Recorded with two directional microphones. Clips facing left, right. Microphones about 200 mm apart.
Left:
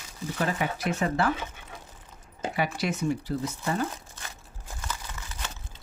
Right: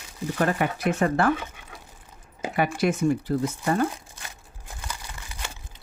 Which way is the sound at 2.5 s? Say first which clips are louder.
Right 6 dB; 55° right (ahead or behind).